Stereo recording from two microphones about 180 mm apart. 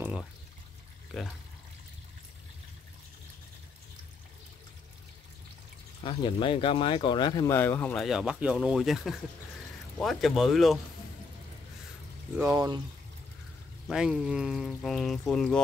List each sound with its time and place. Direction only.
0.0 s pour: 5° right (ahead or behind)
5.9 s speech: 30° left (ahead or behind)
7.5 s speech: 10° left (ahead or behind)
12.4 s speech: 15° right (ahead or behind)
13.8 s speech: 5° right (ahead or behind)